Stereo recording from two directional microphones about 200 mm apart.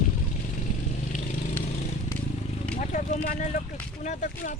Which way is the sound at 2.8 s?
40° left (ahead or behind).